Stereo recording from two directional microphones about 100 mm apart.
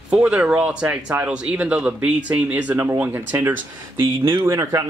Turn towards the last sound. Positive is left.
turn(degrees=-30)  # may be behind; listen again after turning